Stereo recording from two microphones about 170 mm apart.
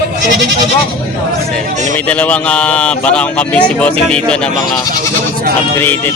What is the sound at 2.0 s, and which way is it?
Speech, 10° left (ahead or behind).